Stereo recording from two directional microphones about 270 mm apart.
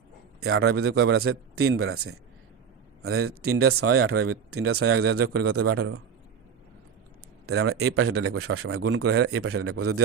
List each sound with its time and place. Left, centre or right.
0.3 s speech: right
7.4 s speech: right